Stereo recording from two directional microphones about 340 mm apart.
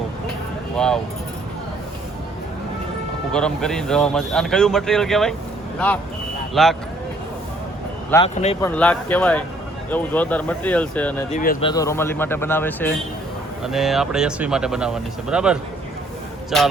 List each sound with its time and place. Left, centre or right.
3.3 s speech: centre
6.5 s speech: centre
8.1 s speech: centre
8.7 s speech: centre
11.3 s speech: left
11.7 s speech: centre